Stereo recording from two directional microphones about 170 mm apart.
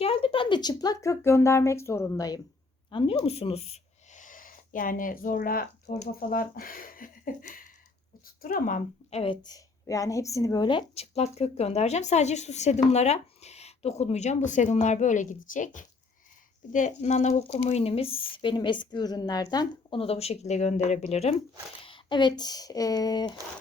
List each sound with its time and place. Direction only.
0.0 s a woman's voice: 35° left (ahead or behind)
21.8 s speech: 30° left (ahead or behind)